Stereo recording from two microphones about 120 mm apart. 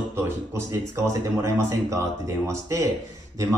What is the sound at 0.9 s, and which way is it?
Speech, 25° right (ahead or behind).